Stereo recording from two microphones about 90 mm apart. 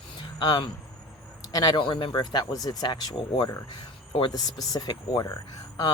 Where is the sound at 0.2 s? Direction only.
55° left (ahead or behind).